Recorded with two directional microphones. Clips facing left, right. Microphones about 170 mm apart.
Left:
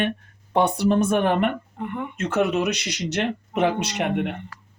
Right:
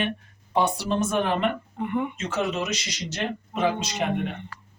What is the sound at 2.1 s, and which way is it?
Speech, 60° left (ahead or behind).